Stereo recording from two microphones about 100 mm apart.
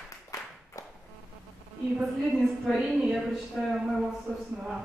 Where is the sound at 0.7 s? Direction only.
35° left (ahead or behind).